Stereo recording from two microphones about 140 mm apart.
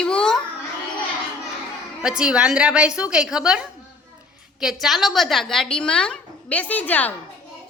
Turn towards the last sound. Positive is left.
turn(degrees=10)  # may be behind; listen again after turning